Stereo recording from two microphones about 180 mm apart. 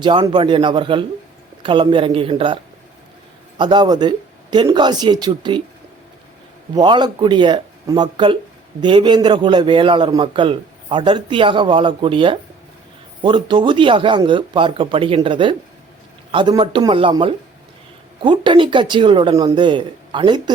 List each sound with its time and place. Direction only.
0.0 s a man's voice: 25° right (ahead or behind)
3.6 s a man's voice: 25° right (ahead or behind)
6.7 s a man's voice: 25° right (ahead or behind)